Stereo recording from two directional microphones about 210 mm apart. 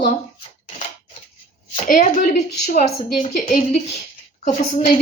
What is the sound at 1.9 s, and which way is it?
A woman's voice, 35° left (ahead or behind).